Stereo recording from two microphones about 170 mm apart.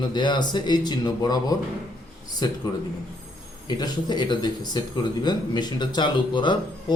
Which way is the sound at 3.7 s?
25° left (ahead or behind).